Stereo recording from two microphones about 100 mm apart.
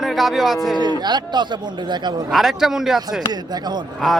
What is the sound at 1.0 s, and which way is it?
A man's voice, 45° right (ahead or behind).